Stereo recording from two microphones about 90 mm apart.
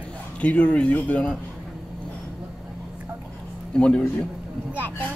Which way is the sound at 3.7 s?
10° left (ahead or behind).